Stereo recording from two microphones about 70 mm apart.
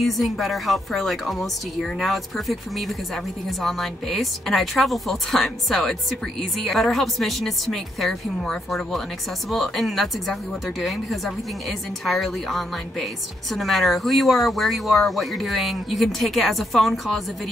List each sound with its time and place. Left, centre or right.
0.0 s speech: centre